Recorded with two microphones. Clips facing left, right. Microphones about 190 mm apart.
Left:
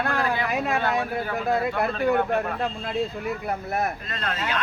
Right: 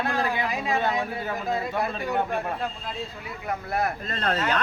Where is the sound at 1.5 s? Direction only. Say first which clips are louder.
Left 4 dB; 60° left (ahead or behind).